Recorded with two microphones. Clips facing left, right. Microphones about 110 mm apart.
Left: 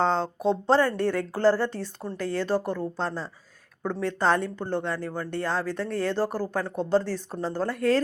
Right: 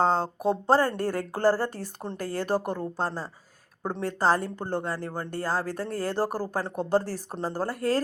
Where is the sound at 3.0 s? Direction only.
40° right (ahead or behind).